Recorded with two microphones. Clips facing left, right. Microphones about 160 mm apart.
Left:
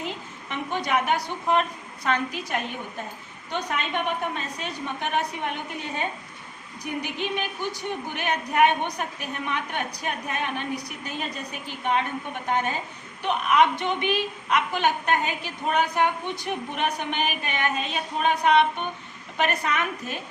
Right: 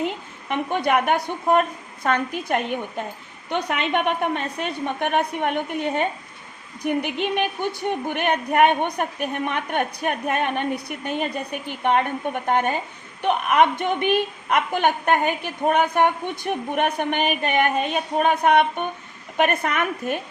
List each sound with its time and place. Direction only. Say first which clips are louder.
0.0 s a woman's voice: right 7 dB; 55° right (ahead or behind)